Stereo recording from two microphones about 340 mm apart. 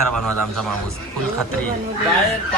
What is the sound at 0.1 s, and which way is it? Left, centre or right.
Speech, right.